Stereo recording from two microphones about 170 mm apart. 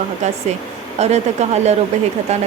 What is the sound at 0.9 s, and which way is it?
Speech, 40° right (ahead or behind).